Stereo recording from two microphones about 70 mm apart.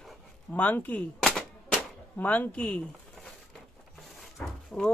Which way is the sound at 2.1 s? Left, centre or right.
Left.